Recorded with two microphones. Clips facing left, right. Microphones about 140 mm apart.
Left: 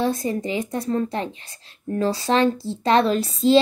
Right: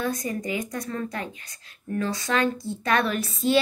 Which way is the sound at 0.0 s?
30° left (ahead or behind).